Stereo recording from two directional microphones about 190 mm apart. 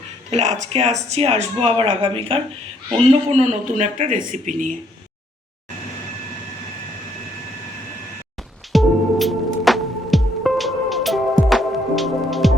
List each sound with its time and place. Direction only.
0.3 s speech: 35° right (ahead or behind)
8.7 s music: centre (ahead or behind)